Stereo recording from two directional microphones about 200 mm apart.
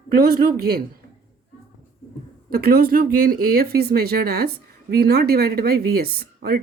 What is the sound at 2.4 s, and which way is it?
Speech, 50° right (ahead or behind).